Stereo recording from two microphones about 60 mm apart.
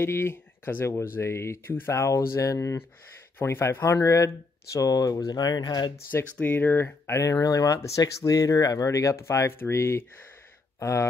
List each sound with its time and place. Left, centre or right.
0.0 s speech: left
1.7 s speech: left
2.0 s speech: left
3.3 s speech: left
4.7 s speech: left
6.4 s speech: left
7.2 s speech: left
9.5 s speech: left